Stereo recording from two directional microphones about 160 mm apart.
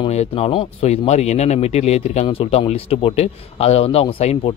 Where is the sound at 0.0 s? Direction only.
40° left (ahead or behind).